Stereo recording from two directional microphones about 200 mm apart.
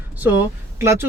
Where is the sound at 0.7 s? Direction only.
15° right (ahead or behind).